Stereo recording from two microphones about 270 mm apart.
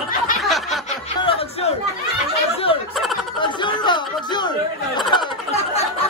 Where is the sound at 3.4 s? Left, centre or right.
Centre.